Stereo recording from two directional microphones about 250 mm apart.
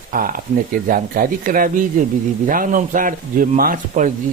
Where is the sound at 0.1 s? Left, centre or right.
Right.